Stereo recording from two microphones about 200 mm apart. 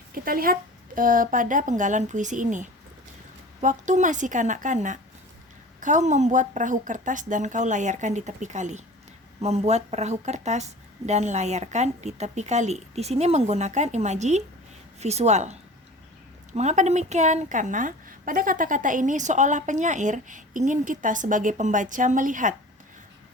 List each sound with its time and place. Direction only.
0.1 s a woman's voice: 45° right (ahead or behind)